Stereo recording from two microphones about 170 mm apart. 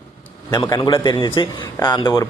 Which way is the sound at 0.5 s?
20° left (ahead or behind).